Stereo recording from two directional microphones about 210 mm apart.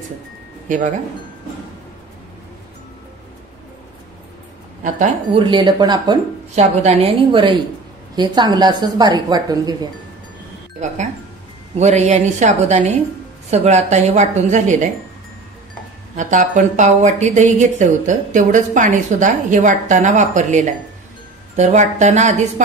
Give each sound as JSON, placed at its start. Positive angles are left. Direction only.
{"t": 0.7, "sound": "a woman's voice", "side_deg": -35}
{"t": 4.9, "sound": "a woman's voice", "side_deg": -25}
{"t": 6.5, "sound": "a woman's voice", "side_deg": -30}
{"t": 11.8, "sound": "a woman's voice", "side_deg": -35}
{"t": 16.2, "sound": "a woman's voice", "side_deg": -35}